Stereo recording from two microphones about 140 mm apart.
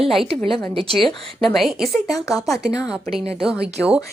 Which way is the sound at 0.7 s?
40° right (ahead or behind).